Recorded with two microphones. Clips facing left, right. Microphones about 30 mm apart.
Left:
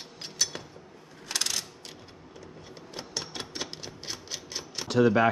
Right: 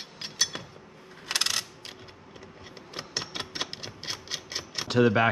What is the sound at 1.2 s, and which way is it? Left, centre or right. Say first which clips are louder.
Coin: right 3 dB; right.